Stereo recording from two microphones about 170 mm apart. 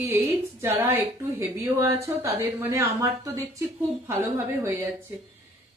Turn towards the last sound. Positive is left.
turn(degrees=-15)  # may be behind; listen again after turning